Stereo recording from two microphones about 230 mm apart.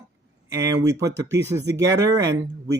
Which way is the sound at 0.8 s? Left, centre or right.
Centre.